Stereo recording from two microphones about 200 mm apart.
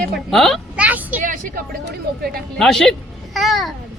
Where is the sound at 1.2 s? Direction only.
40° right (ahead or behind).